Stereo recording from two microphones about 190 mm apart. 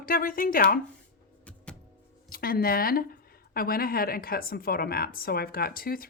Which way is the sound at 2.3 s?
50° left (ahead or behind).